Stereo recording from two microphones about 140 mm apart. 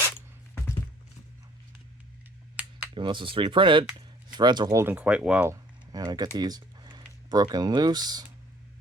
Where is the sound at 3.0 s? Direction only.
35° right (ahead or behind).